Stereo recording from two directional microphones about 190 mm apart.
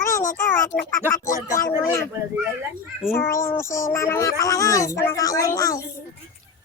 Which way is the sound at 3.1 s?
10° left (ahead or behind).